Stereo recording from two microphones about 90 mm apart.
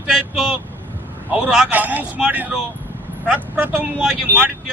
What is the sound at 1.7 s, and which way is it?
Speech, 20° right (ahead or behind).